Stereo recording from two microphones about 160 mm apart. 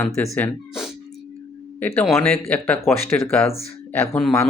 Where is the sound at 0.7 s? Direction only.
Centre (ahead or behind).